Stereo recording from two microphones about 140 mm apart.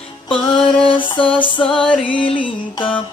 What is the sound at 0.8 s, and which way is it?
Music, 35° left (ahead or behind).